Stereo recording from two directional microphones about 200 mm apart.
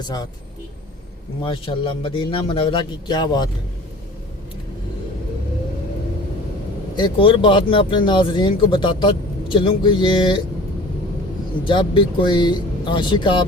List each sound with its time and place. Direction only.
0.0 s speech: 20° left (ahead or behind)
1.5 s speech: 25° left (ahead or behind)
6.9 s speech: 25° left (ahead or behind)
11.6 s speech: 25° left (ahead or behind)